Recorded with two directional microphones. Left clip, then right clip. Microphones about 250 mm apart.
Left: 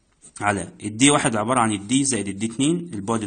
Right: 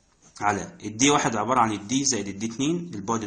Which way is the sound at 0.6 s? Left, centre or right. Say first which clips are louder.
Left 3 dB; left.